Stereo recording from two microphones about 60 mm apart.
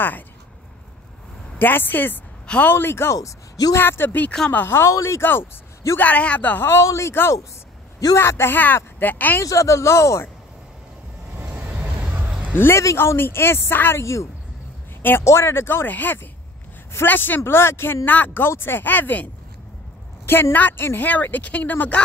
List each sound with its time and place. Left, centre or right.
1.6 s speech: left
3.2 s speech: left
3.7 s speech: left
4.9 s speech: left
5.9 s speech: left
6.6 s speech: left
9.4 s speech: left
11.3 s vehicle: right
12.5 s a man's voice: left
15.2 s speech: left
17.4 s speech: left
18.0 s speech: left
20.5 s speech: left